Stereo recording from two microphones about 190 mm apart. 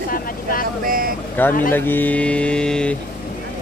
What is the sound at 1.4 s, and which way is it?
Mantra, 10° left (ahead or behind).